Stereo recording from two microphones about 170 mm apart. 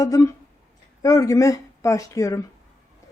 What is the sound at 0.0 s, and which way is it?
A woman's voice, 20° left (ahead or behind).